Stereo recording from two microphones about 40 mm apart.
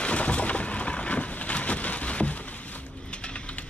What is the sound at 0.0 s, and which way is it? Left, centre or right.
Rain, left.